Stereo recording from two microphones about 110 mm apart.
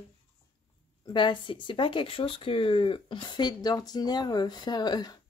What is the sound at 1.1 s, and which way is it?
Speech, 45° left (ahead or behind).